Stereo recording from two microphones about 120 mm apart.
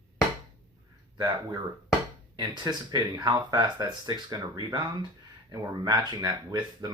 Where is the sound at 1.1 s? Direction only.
35° right (ahead or behind).